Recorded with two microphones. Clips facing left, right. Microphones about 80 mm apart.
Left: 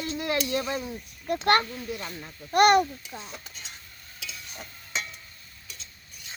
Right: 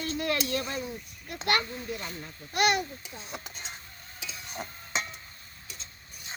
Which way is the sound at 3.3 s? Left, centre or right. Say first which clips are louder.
Right 2 dB; centre.